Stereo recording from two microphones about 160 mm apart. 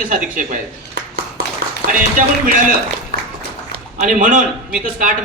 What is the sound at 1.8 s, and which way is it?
Speech, 90° right.